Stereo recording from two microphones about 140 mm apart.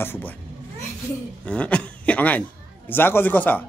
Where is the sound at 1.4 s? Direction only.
10° left (ahead or behind).